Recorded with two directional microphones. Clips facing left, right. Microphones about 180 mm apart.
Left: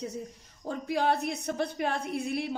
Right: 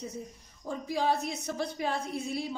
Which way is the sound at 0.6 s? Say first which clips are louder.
Left 2 dB; 65° left (ahead or behind).